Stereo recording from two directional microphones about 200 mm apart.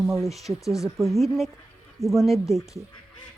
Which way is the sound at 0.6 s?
15° left (ahead or behind).